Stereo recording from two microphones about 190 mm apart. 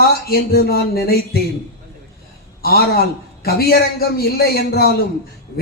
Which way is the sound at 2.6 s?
55° left (ahead or behind).